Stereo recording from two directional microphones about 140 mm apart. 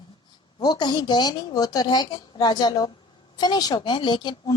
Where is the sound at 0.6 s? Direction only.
30° left (ahead or behind).